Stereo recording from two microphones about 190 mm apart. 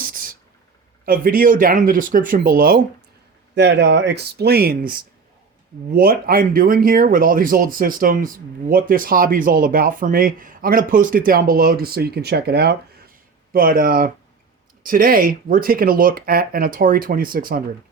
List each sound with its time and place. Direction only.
0.0 s a sound: 50° right (ahead or behind)
1.0 s speech: 45° right (ahead or behind)
3.5 s speech: 65° right (ahead or behind); by 17.6 s 50° right (ahead or behind)